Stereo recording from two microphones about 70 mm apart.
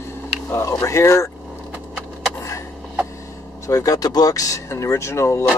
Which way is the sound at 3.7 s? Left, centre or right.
Left.